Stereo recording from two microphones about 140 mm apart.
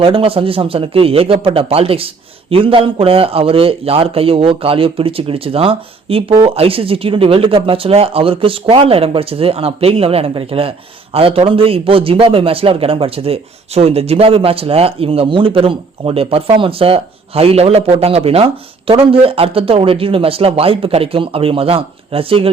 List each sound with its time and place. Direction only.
0.0 s speech: 40° right (ahead or behind)